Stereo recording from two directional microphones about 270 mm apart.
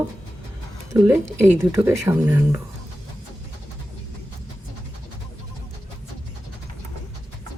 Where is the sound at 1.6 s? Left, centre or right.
Centre.